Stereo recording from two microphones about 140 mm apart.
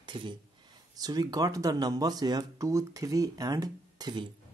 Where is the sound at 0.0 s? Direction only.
35° right (ahead or behind).